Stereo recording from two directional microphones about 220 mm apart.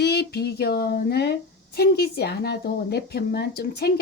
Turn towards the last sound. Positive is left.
turn(degrees=45)  # may be behind; listen again after turning